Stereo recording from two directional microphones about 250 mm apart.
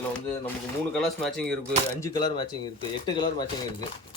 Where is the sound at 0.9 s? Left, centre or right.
Centre.